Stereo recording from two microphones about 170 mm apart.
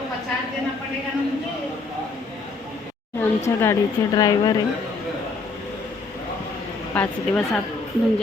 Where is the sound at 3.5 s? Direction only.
15° left (ahead or behind).